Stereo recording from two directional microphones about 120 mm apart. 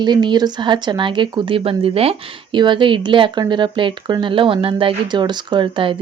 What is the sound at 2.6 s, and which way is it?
Speech, 40° right (ahead or behind).